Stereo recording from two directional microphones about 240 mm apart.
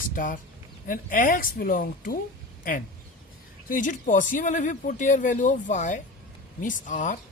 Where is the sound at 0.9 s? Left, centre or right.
Left.